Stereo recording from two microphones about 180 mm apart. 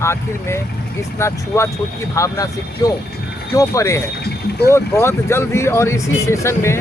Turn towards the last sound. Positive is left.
turn(degrees=15)  # may be behind; listen again after turning